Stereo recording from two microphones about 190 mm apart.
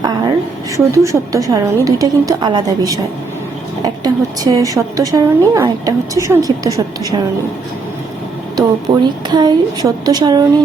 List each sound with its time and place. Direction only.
0.9 s a woman's voice: 15° right (ahead or behind)
8.5 s a woman's voice: 20° right (ahead or behind)